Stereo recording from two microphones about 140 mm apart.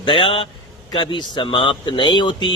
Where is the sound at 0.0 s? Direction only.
40° left (ahead or behind).